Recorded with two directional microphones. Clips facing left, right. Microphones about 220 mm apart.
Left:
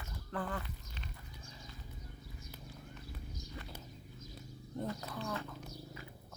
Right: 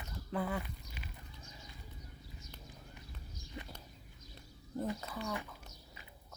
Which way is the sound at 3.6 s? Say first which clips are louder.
Right 3 dB; 20° right (ahead or behind).